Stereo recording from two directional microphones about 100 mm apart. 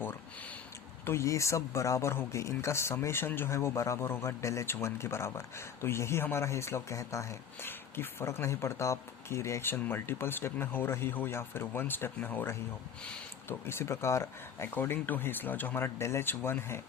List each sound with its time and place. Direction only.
1.0 s speech: 30° left (ahead or behind)